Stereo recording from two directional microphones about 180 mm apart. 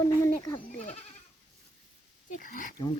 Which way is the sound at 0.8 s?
35° left (ahead or behind).